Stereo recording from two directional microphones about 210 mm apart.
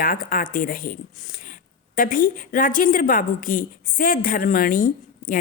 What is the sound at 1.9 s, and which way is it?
A woman's voice, 40° left (ahead or behind).